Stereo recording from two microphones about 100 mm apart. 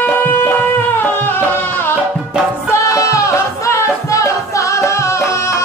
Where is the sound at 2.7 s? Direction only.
30° left (ahead or behind).